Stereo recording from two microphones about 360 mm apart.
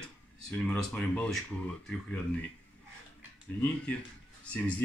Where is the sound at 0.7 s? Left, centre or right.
Centre.